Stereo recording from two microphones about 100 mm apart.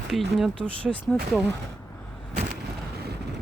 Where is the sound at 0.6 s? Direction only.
10° left (ahead or behind).